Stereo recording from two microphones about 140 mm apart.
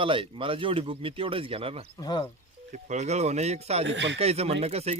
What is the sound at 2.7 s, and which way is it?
Speech, 60° right (ahead or behind).